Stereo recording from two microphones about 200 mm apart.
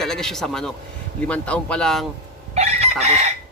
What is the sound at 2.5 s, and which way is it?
Chicken, 35° right (ahead or behind).